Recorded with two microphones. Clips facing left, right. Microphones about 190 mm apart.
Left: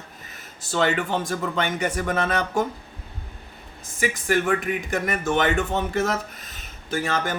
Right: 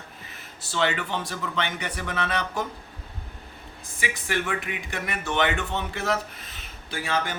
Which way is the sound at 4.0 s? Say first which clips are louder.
Left 6 dB; 45° left (ahead or behind).